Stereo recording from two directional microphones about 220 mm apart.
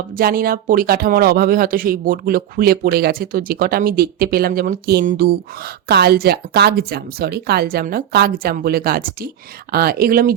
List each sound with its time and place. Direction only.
0.2 s speech: 40° right (ahead or behind)